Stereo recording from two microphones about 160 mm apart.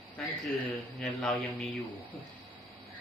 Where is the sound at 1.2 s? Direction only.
Centre (ahead or behind).